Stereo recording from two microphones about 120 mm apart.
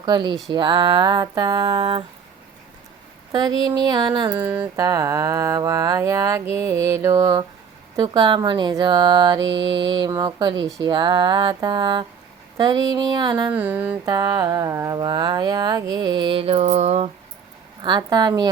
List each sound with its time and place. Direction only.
0.0 s speech: 40° right (ahead or behind)
3.3 s speech: 35° right (ahead or behind)
4.3 s a sound: 15° right (ahead or behind)
4.8 s speech: 30° right (ahead or behind)
13.5 s a sound: 15° right (ahead or behind)
14.0 s speech: 35° right (ahead or behind)
14.9 s speech: 35° right (ahead or behind); by 17.1 s 65° right (ahead or behind)
17.8 s speech: 35° right (ahead or behind)